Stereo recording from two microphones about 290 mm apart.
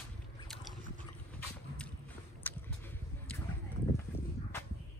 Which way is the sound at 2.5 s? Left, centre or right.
Centre.